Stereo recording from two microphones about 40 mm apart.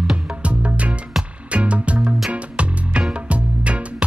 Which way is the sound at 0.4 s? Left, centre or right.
Right.